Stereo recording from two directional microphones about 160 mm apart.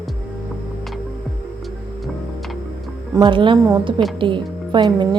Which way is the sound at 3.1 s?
30° right (ahead or behind).